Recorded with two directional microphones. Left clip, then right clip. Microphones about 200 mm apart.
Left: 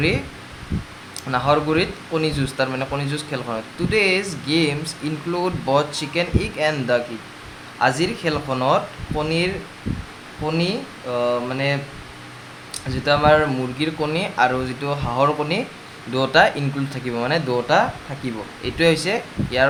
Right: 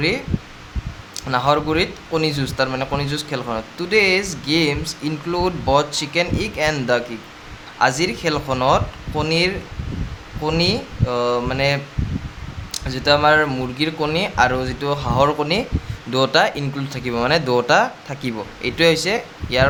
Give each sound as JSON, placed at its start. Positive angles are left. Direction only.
{"t": 1.1, "sound": "speech", "side_deg": -20}